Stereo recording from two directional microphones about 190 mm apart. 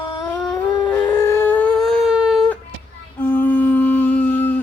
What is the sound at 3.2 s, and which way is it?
Music, 10° left (ahead or behind).